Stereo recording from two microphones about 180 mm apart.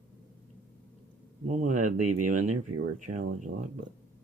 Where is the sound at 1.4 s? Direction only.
45° right (ahead or behind).